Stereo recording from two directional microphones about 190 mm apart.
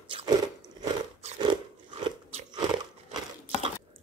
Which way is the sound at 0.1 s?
25° right (ahead or behind).